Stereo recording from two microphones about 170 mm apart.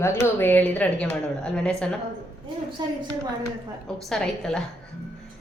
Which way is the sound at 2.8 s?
25° right (ahead or behind).